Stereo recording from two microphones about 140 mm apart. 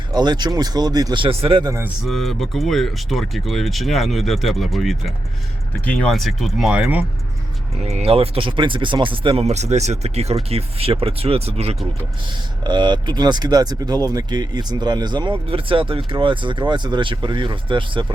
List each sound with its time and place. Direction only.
0.1 s speech: 30° right (ahead or behind)
2.0 s speech: centre (ahead or behind)
7.9 s speech: 45° right (ahead or behind)
12.6 s speech: 35° right (ahead or behind)